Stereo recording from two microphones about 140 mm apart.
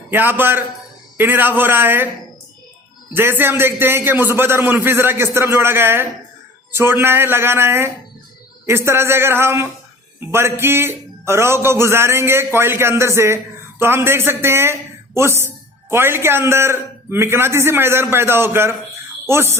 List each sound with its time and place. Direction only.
0.1 s a man's voice: 15° right (ahead or behind)
3.2 s a man's voice: 15° right (ahead or behind)